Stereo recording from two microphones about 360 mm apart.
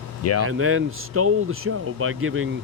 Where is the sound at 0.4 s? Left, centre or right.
Right.